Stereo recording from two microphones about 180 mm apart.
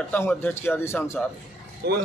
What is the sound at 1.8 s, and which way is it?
Speech, 65° right (ahead or behind).